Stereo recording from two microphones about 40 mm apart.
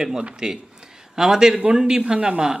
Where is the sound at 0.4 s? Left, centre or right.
Right.